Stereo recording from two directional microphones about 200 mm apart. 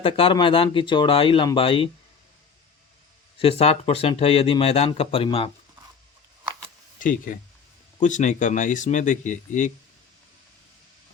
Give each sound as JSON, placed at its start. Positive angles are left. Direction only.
{"t": 0.0, "sound": "speech", "side_deg": 25}
{"t": 3.3, "sound": "speech", "side_deg": 30}
{"t": 7.0, "sound": "speech", "side_deg": 40}